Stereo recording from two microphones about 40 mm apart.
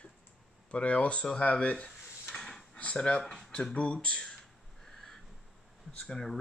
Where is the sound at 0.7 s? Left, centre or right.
Left.